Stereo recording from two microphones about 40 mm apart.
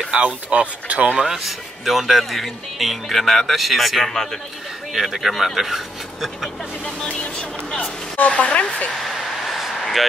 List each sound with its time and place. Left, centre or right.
0.1 s speech: right
1.1 s speech: centre
4.9 s speech: centre
7.1 s vehicle: left
8.3 s speech: left
9.5 s a sound: centre